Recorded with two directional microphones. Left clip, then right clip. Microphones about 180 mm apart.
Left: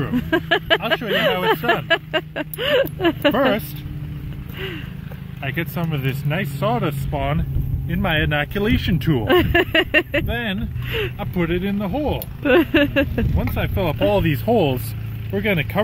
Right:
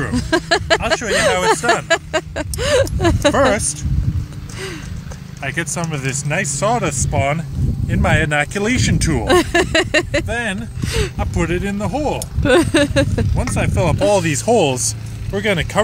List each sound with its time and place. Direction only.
0.0 s speech: 10° right (ahead or behind)
5.4 s speech: 10° right (ahead or behind)